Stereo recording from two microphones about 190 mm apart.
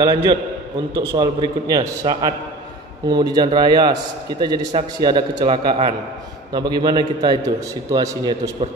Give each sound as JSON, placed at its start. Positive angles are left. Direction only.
{"t": 0.0, "sound": "a man's voice", "side_deg": -25}